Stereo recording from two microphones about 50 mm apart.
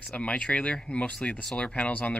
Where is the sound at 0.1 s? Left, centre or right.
Left.